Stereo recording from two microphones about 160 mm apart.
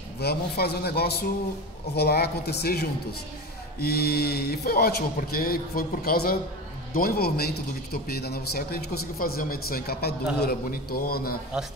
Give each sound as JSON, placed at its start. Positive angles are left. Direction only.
{"t": 0.2, "sound": "a man's voice", "side_deg": 85}